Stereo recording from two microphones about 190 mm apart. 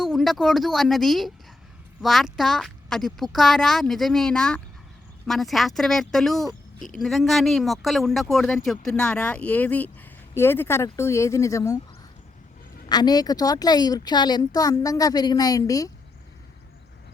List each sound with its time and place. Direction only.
0.0 s a woman's voice: centre (ahead or behind); by 11.8 s 15° left (ahead or behind)
12.9 s a woman's voice: 20° left (ahead or behind)